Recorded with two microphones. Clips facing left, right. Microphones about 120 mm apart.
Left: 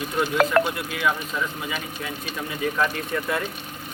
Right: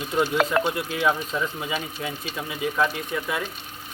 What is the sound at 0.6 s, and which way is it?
Speech, 25° right (ahead or behind).